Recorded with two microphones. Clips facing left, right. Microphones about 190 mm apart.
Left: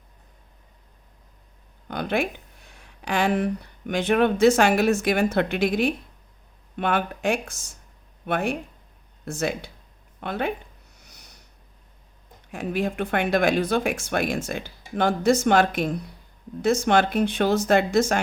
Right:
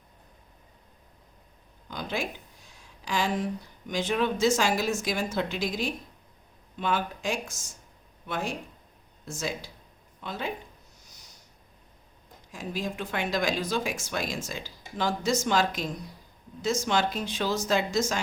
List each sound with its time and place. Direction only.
1.9 s speech: 60° left (ahead or behind)
10.9 s snort: 65° left (ahead or behind)
12.5 s speech: 60° left (ahead or behind)